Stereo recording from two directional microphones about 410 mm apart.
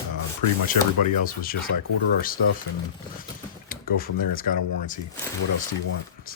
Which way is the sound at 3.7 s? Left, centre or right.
Left.